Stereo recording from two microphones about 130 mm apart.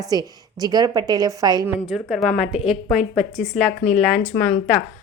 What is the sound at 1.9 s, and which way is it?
A woman's voice, centre (ahead or behind).